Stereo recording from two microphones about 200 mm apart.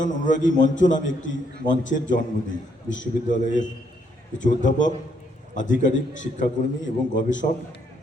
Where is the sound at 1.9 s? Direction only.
40° left (ahead or behind).